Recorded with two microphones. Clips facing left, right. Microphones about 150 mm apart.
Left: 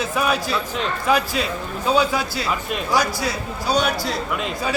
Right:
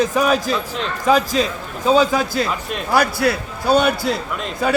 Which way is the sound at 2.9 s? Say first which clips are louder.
Right 5 dB; 60° right (ahead or behind).